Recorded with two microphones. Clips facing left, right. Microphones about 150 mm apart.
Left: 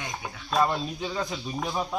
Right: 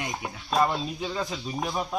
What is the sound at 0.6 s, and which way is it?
Speech, 5° right (ahead or behind).